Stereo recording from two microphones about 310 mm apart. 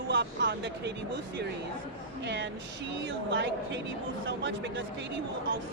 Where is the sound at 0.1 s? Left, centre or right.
Right.